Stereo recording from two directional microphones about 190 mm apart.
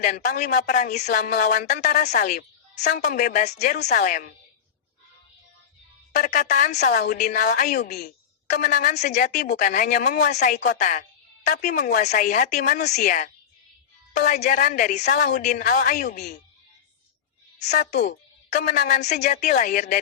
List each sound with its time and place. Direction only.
0.0 s speech: 40° left (ahead or behind)
6.1 s speech: 40° left (ahead or behind)
17.6 s speech: 40° left (ahead or behind)